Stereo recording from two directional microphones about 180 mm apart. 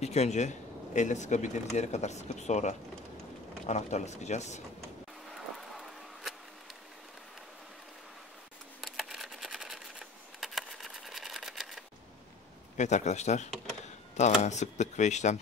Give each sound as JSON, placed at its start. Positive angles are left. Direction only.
{"t": 0.0, "sound": "speech", "side_deg": 35}
{"t": 5.3, "sound": "vehicle", "side_deg": 0}
{"t": 8.8, "sound": "a sound", "side_deg": 0}
{"t": 12.7, "sound": "speech", "side_deg": 40}